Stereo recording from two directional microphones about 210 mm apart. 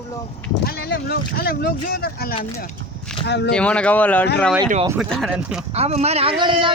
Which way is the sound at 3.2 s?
55° left (ahead or behind).